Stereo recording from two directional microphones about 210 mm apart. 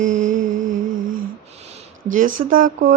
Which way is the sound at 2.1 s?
40° right (ahead or behind).